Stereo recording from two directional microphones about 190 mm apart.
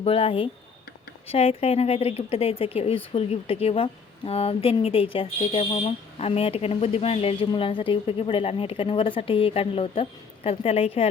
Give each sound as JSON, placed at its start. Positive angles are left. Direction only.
{"t": 0.0, "sound": "a woman's voice", "side_deg": 30}